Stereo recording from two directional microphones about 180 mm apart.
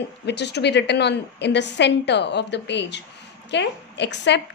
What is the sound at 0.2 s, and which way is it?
A woman's voice, 70° left (ahead or behind).